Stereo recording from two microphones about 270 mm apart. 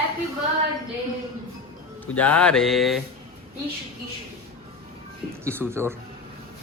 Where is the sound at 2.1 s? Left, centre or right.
Centre.